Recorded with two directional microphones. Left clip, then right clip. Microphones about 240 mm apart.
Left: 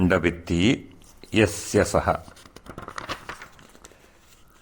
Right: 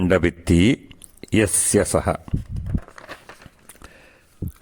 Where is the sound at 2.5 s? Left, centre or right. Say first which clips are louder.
Right 1 dB; left.